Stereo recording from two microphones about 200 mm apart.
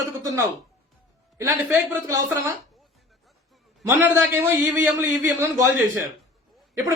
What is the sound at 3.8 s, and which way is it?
A man's voice, 10° right (ahead or behind).